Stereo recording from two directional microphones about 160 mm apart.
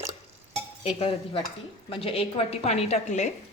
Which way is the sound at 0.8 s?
35° left (ahead or behind).